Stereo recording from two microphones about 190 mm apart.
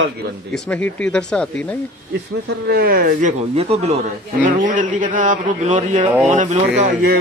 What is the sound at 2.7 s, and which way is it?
Speech, 50° right (ahead or behind).